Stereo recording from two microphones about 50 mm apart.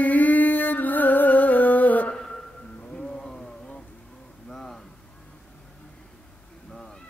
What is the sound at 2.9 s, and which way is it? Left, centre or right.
Vehicle, centre.